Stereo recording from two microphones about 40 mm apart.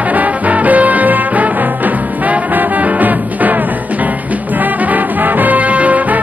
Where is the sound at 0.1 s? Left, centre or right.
Right.